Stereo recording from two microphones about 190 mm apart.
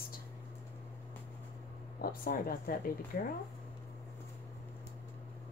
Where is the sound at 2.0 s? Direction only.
50° left (ahead or behind).